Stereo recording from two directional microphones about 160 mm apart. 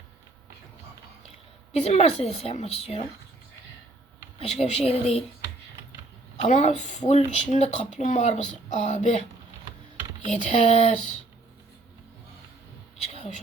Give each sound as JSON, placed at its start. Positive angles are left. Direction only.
{"t": 1.8, "sound": "speech", "side_deg": 40}
{"t": 4.4, "sound": "speech", "side_deg": 40}
{"t": 6.3, "sound": "speech", "side_deg": 45}
{"t": 10.2, "sound": "speech", "side_deg": 45}
{"t": 13.0, "sound": "a sound", "side_deg": 45}